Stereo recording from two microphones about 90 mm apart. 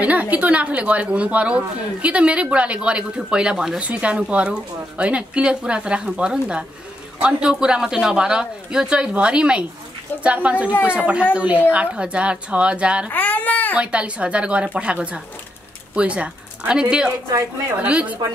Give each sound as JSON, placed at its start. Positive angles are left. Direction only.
{"t": 0.0, "sound": "a woman's voice", "side_deg": -15}
{"t": 13.1, "sound": "baby cry", "side_deg": 20}
{"t": 13.7, "sound": "a woman's voice", "side_deg": -15}